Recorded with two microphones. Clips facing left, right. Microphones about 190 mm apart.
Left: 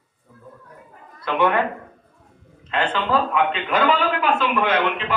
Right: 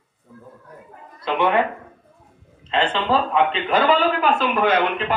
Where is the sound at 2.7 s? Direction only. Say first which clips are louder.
Right 1 dB; 25° right (ahead or behind).